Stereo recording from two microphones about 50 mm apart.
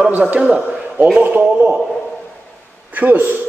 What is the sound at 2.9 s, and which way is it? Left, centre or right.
Speech, right.